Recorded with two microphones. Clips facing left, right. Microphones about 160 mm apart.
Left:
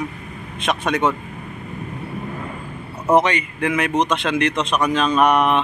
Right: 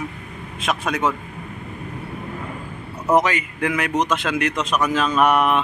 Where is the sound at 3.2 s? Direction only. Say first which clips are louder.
Left 1 dB; centre (ahead or behind).